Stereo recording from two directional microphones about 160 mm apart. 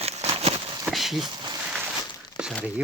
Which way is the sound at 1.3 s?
30° right (ahead or behind).